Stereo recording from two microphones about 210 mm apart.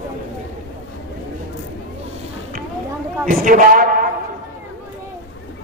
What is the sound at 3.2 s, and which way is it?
Speech, 40° right (ahead or behind).